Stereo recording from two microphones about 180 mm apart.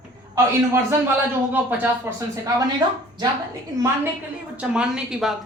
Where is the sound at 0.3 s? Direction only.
15° right (ahead or behind).